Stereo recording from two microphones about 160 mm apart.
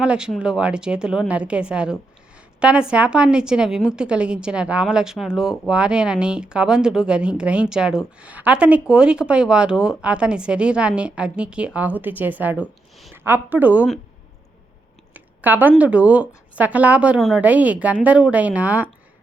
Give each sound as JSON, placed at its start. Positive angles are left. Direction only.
{"t": 0.0, "sound": "a woman's voice", "side_deg": -5}
{"t": 15.1, "sound": "a sound", "side_deg": -10}
{"t": 15.8, "sound": "a woman's voice", "side_deg": -10}